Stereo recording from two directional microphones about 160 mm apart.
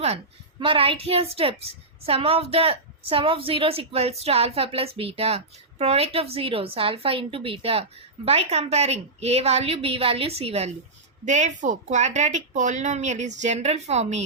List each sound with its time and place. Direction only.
0.6 s a woman's voice: 35° right (ahead or behind)